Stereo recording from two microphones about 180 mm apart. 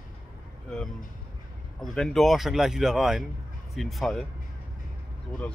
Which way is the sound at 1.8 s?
Centre (ahead or behind).